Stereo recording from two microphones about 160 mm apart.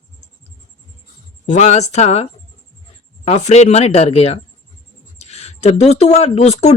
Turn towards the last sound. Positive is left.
turn(degrees=40)  # may be behind; listen again after turning